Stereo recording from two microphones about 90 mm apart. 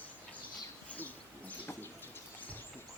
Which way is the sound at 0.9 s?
15° left (ahead or behind).